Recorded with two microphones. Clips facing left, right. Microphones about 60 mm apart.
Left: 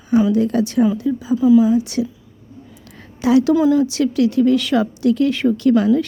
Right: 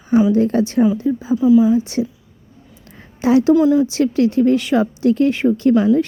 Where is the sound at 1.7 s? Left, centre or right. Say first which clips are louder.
Even; right.